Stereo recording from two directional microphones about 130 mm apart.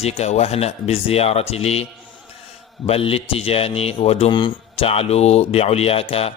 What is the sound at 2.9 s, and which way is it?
A man's voice, 45° left (ahead or behind).